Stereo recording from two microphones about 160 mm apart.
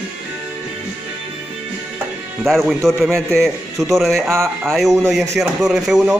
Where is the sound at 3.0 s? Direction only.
15° right (ahead or behind).